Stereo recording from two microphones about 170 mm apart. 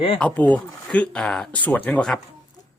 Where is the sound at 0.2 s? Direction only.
5° left (ahead or behind).